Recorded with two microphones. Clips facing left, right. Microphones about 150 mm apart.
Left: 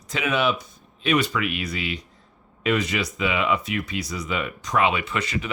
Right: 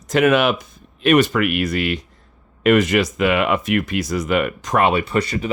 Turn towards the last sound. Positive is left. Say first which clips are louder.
# right 7 dB
turn(degrees=-35)  # may be behind; listen again after turning